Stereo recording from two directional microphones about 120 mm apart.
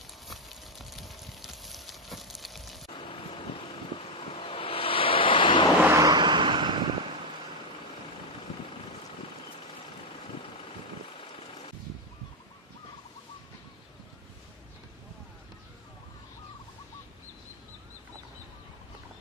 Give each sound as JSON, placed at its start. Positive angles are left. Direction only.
{"t": 0.8, "sound": "a sound", "side_deg": 0}
{"t": 2.9, "sound": "vehicle", "side_deg": 45}
{"t": 5.8, "sound": "vehicle", "side_deg": -25}